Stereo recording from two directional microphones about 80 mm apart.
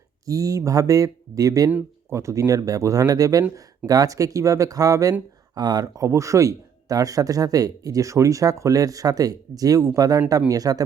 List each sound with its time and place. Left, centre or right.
0.3 s speech: right
5.5 s speech: right